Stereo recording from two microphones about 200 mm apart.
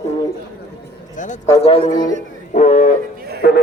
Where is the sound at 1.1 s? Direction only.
40° left (ahead or behind).